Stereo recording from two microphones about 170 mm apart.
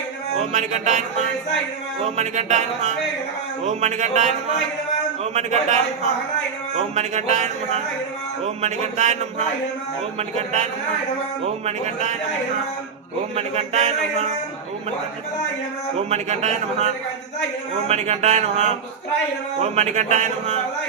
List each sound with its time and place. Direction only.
0.3 s music: 45° right (ahead or behind)
2.0 s a man's voice: 40° right (ahead or behind)
3.7 s music: 45° right (ahead or behind)
5.2 s a man's voice: 40° right (ahead or behind)
6.7 s a man's voice: 40° right (ahead or behind)
8.6 s music: 45° right (ahead or behind)
10.2 s a man's voice: 40° right (ahead or behind)
13.3 s a man's voice: 40° right (ahead or behind)
16.0 s a man's voice: 40° right (ahead or behind)
19.7 s music: 45° right (ahead or behind)